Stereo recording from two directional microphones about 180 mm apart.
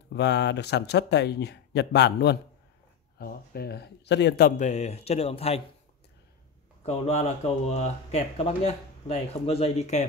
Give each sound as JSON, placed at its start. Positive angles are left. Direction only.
{"t": 0.1, "sound": "speech", "side_deg": 75}
{"t": 3.2, "sound": "speech", "side_deg": 60}
{"t": 4.5, "sound": "speech", "side_deg": 40}
{"t": 6.8, "sound": "speech", "side_deg": 35}